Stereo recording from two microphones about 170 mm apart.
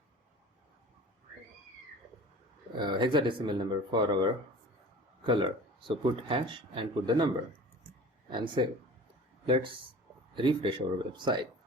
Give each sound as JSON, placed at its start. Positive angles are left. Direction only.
{"t": 2.7, "sound": "speech", "side_deg": -25}
{"t": 8.3, "sound": "speech", "side_deg": -30}
{"t": 10.3, "sound": "speech", "side_deg": -30}